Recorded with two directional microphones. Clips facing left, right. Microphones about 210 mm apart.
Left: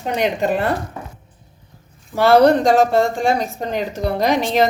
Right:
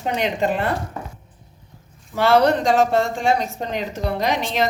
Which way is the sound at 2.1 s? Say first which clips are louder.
Left 4 dB; 40° left (ahead or behind).